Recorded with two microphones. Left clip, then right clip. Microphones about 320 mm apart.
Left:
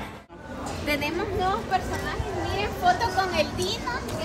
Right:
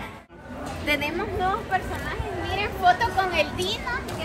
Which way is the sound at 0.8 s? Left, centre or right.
Centre.